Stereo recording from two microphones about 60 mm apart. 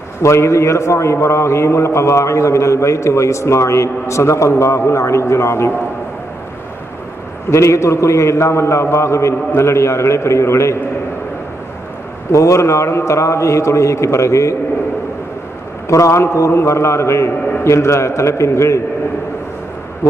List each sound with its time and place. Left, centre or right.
0.2 s a man's voice: left
7.5 s a man's voice: left
12.3 s a man's voice: left
15.9 s a man's voice: left